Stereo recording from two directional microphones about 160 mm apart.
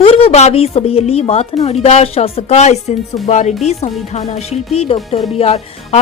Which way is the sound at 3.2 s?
50° left (ahead or behind).